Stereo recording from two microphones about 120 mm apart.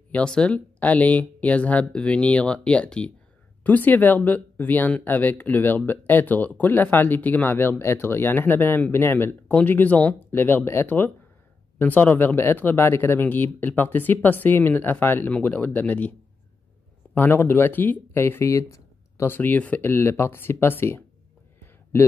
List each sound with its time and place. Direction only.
0.1 s speech: 10° left (ahead or behind)